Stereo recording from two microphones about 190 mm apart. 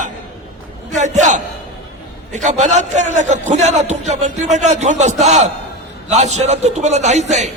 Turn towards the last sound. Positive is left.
turn(degrees=-35)  # may be behind; listen again after turning